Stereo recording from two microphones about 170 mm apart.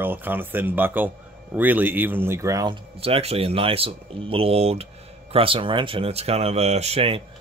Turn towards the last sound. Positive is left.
turn(degrees=-30)  # may be behind; listen again after turning